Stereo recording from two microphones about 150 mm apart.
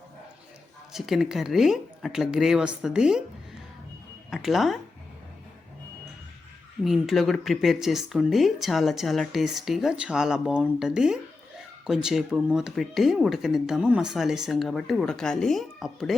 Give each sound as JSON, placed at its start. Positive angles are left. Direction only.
{"t": 0.9, "sound": "speech", "side_deg": 0}
{"t": 4.3, "sound": "speech", "side_deg": 0}
{"t": 6.8, "sound": "speech", "side_deg": 0}